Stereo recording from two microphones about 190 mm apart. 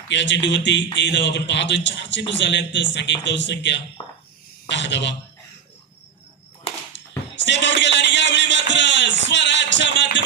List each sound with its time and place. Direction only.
0.1 s speech: 70° left (ahead or behind)
7.4 s music: 70° left (ahead or behind)